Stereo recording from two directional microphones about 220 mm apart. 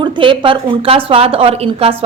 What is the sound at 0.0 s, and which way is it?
Speech, 25° right (ahead or behind).